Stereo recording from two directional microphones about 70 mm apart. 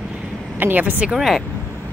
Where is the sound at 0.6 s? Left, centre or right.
Right.